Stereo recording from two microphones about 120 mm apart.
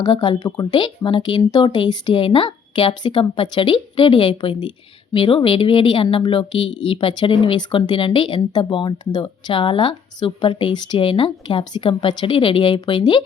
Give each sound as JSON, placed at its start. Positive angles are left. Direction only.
{"t": 0.0, "sound": "speech", "side_deg": 40}